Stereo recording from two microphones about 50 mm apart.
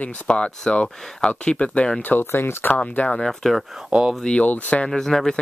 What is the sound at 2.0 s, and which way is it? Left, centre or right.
Speech, left.